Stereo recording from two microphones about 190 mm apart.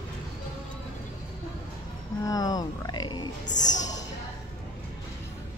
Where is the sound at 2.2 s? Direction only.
20° left (ahead or behind).